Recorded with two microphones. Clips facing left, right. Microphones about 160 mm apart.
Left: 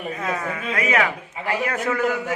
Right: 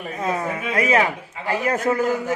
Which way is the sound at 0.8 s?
30° right (ahead or behind).